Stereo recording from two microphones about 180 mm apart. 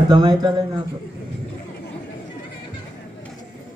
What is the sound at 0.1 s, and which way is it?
Speech, 20° right (ahead or behind).